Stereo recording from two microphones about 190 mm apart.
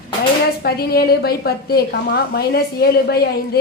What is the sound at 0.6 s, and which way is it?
A woman's voice, 55° left (ahead or behind).